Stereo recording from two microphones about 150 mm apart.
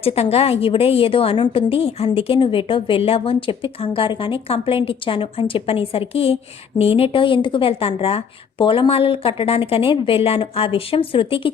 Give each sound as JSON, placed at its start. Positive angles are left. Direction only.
{"t": 0.0, "sound": "a woman's voice", "side_deg": 40}